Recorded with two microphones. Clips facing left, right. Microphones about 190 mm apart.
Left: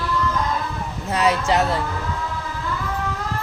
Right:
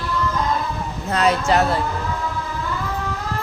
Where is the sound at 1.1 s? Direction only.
10° left (ahead or behind).